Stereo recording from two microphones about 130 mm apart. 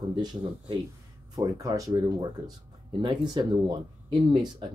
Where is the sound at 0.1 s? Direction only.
35° right (ahead or behind).